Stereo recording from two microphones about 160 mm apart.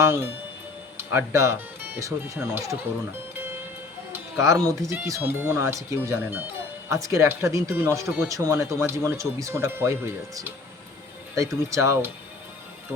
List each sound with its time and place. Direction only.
0.0 s speech: 15° right (ahead or behind)
4.1 s speech: 20° right (ahead or behind)